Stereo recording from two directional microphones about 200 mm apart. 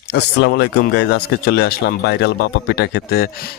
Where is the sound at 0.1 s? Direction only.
60° left (ahead or behind).